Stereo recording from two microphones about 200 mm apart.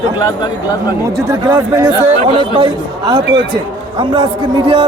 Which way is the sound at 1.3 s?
15° right (ahead or behind).